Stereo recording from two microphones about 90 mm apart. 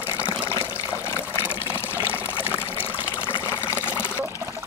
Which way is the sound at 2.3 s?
25° left (ahead or behind).